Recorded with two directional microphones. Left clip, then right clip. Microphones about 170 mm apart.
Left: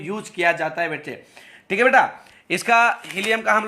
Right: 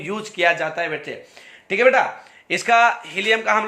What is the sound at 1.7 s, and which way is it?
A man's voice, 40° left (ahead or behind).